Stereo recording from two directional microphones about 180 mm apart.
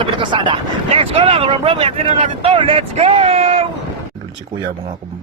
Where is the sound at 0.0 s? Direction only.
25° right (ahead or behind).